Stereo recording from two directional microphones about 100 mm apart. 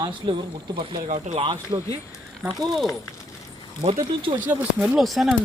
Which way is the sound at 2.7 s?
Centre (ahead or behind).